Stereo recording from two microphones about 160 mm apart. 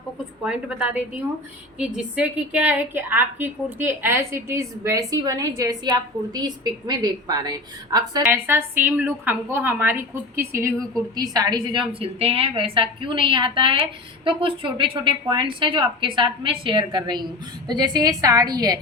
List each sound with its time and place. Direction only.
0.4 s a woman's voice: 5° right (ahead or behind); by 18.8 s 25° right (ahead or behind)